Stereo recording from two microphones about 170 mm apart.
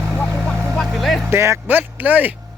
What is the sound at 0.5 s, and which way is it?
Vehicle, 15° right (ahead or behind).